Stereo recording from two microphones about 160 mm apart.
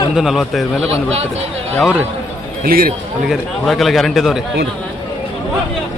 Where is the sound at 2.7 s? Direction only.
65° right (ahead or behind).